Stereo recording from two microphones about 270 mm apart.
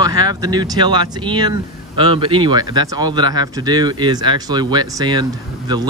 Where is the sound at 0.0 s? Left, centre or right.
Centre.